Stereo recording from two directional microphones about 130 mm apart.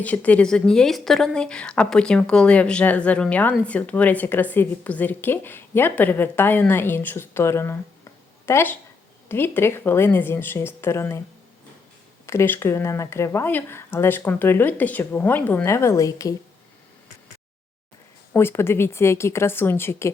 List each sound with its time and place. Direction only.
0.0 s a woman's voice: 10° left (ahead or behind)
12.2 s speech: 20° left (ahead or behind)
18.3 s speech: 20° left (ahead or behind)